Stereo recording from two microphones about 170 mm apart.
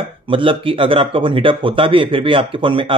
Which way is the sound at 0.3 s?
30° right (ahead or behind).